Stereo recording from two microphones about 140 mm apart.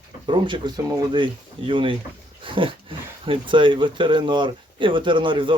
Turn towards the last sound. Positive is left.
turn(degrees=-35)  # may be behind; listen again after turning